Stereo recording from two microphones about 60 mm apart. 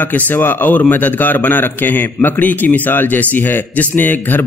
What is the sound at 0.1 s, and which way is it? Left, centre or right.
A man's voice, left.